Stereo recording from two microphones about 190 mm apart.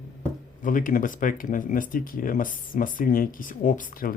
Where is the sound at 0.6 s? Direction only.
45° left (ahead or behind).